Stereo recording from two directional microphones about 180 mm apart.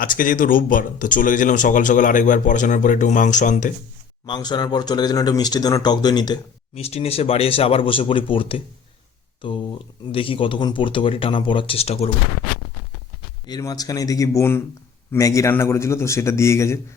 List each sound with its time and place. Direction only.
0.0 s speech: 50° left (ahead or behind)
4.3 s speech: 25° left (ahead or behind)
13.5 s a man's voice: 20° left (ahead or behind)